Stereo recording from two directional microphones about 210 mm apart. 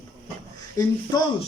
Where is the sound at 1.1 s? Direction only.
20° left (ahead or behind).